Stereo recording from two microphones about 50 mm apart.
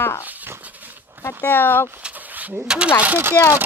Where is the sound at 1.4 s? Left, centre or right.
Left.